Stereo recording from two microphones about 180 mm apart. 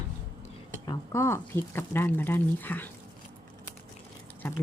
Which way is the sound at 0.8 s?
20° left (ahead or behind).